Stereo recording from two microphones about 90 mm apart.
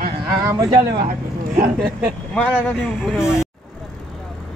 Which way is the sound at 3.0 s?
5° right (ahead or behind).